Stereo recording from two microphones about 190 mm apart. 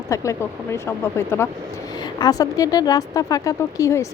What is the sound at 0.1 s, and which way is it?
A woman's voice, 15° left (ahead or behind).